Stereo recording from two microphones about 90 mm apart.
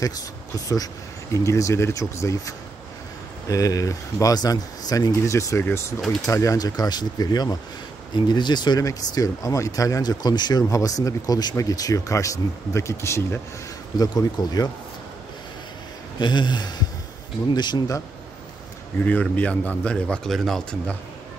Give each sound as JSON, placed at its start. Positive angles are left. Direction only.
{"t": 1.3, "sound": "speech", "side_deg": 35}
{"t": 5.2, "sound": "speech", "side_deg": 35}
{"t": 8.8, "sound": "speech", "side_deg": 40}
{"t": 13.9, "sound": "speech", "side_deg": 50}
{"t": 16.2, "sound": "speech", "side_deg": 60}
{"t": 18.9, "sound": "a man's voice", "side_deg": 20}
{"t": 20.2, "sound": "speech", "side_deg": 5}